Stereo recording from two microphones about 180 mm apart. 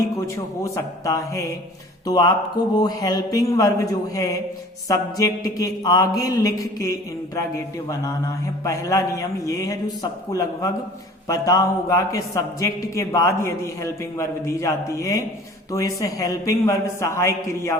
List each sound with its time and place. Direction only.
0.2 s a man's voice: 15° left (ahead or behind)
2.0 s mantra: 20° left (ahead or behind)
7.3 s a man's voice: 15° left (ahead or behind)